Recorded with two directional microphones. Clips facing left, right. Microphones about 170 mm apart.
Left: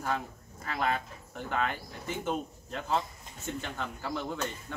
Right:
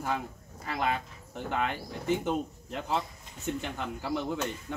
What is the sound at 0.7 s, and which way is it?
Speech, 15° right (ahead or behind).